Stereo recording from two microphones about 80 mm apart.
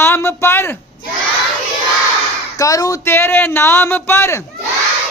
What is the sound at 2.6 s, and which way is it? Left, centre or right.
Speech, left.